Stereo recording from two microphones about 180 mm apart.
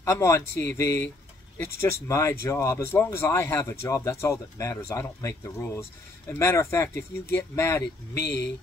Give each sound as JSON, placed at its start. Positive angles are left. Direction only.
{"t": 0.0, "sound": "speech", "side_deg": 15}
{"t": 7.8, "sound": "speech", "side_deg": 65}